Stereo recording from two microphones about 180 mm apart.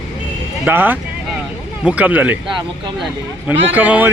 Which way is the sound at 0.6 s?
10° right (ahead or behind).